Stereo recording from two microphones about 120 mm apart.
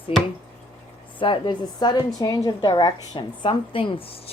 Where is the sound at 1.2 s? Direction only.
40° left (ahead or behind).